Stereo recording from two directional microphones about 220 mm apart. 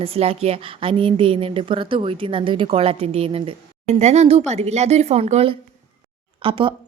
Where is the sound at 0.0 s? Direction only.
25° right (ahead or behind).